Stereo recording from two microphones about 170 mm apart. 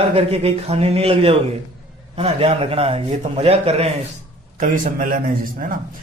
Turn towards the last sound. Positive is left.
turn(degrees=-55)  # may be behind; listen again after turning